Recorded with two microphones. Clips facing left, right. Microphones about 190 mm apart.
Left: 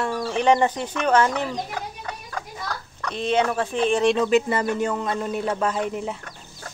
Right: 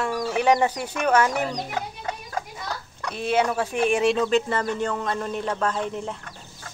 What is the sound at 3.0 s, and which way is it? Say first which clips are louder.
Speech: left 1 dB; 10° right (ahead or behind).